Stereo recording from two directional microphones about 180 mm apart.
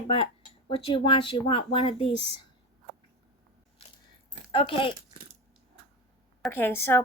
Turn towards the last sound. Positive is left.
turn(degrees=10)  # may be behind; listen again after turning